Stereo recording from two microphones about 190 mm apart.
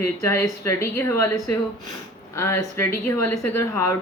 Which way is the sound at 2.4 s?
15° left (ahead or behind).